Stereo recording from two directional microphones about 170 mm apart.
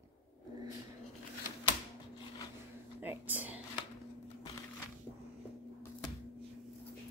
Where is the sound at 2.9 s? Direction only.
10° right (ahead or behind).